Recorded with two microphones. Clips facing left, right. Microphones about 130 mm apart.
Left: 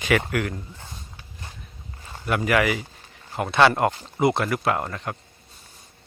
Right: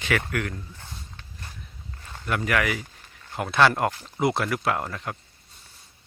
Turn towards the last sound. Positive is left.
turn(degrees=0)  # may be behind; listen again after turning